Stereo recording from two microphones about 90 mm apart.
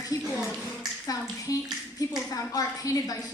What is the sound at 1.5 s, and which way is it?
A woman's voice, 40° left (ahead or behind).